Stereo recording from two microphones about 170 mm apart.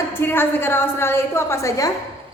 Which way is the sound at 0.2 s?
10° left (ahead or behind).